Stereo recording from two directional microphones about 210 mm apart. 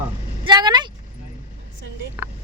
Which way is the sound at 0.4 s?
20° right (ahead or behind).